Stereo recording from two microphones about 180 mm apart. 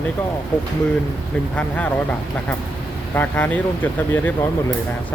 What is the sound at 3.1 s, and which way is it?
Speech, 10° left (ahead or behind).